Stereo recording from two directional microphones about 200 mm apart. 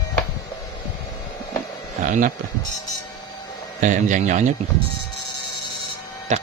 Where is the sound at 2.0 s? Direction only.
40° right (ahead or behind).